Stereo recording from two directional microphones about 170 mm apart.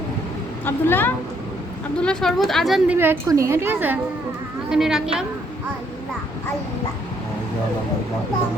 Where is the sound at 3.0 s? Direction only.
15° right (ahead or behind).